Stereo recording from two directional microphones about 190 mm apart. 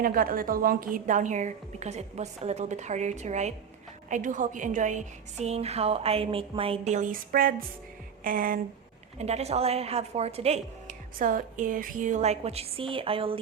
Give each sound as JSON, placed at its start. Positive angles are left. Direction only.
{"t": 0.0, "sound": "a woman's voice", "side_deg": -50}
{"t": 8.2, "sound": "a sound", "side_deg": -45}
{"t": 9.1, "sound": "a woman's voice", "side_deg": -35}